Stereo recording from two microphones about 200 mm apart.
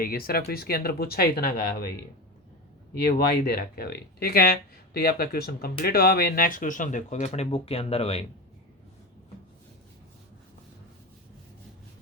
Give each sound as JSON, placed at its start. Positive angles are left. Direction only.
{"t": 0.0, "sound": "speech", "side_deg": 45}
{"t": 2.9, "sound": "speech", "side_deg": 50}